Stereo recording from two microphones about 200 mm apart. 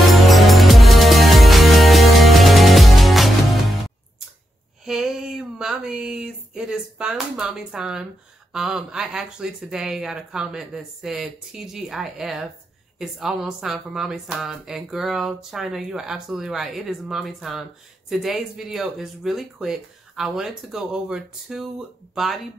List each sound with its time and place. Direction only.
0.1 s music: centre (ahead or behind)
4.8 s a sound: centre (ahead or behind)
8.5 s speech: 5° right (ahead or behind)